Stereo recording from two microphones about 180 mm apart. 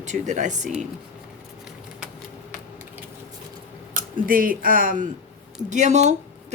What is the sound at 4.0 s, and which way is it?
A woman's voice, 50° right (ahead or behind).